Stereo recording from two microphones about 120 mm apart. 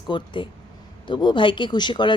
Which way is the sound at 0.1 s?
40° left (ahead or behind).